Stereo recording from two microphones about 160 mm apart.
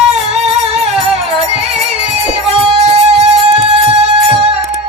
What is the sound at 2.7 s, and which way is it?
Music, 40° right (ahead or behind).